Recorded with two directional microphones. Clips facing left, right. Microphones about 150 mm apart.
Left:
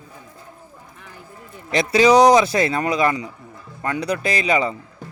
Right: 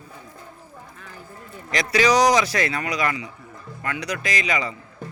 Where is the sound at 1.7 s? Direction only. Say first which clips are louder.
Left 5 dB; 25° left (ahead or behind).